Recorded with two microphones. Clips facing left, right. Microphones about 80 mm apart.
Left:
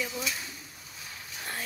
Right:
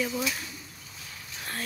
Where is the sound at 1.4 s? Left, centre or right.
Centre.